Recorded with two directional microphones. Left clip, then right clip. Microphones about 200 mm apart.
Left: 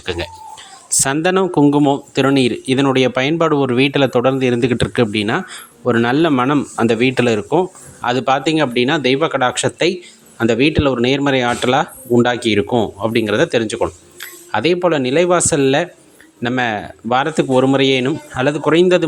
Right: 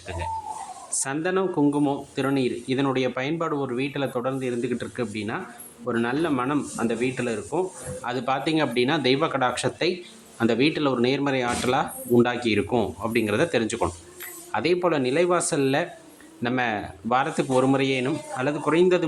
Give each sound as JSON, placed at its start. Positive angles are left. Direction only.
{"t": 0.0, "sound": "speech", "side_deg": 50}